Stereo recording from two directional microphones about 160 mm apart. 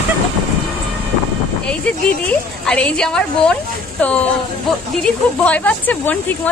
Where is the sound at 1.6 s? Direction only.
5° left (ahead or behind).